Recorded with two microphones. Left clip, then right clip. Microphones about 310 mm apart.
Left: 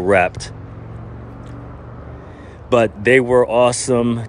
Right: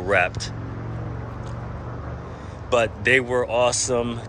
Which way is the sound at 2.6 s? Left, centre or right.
Left.